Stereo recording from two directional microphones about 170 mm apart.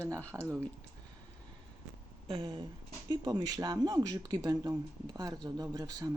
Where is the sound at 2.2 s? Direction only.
30° right (ahead or behind).